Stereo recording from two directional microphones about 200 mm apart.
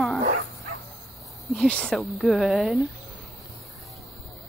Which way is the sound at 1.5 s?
5° left (ahead or behind).